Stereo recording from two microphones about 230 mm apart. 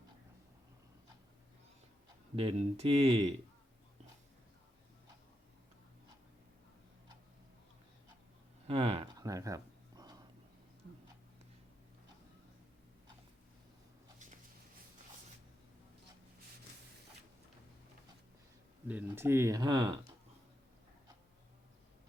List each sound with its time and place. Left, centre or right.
2.3 s speech: right
8.6 s a sound: right
18.9 s speech: centre